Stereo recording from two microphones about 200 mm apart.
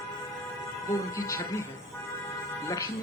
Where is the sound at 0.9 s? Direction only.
15° left (ahead or behind).